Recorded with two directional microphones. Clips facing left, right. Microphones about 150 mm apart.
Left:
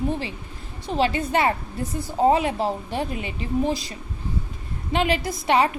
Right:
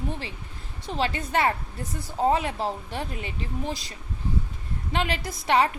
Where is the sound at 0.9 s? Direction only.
10° left (ahead or behind).